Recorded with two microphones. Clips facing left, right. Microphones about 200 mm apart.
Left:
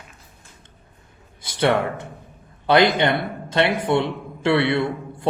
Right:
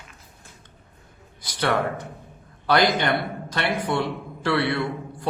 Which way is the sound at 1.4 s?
25° left (ahead or behind).